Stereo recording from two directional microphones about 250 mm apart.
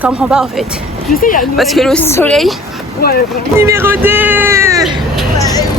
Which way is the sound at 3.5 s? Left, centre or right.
Centre.